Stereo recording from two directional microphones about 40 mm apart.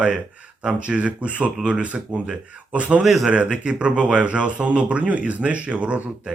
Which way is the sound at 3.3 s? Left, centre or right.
Right.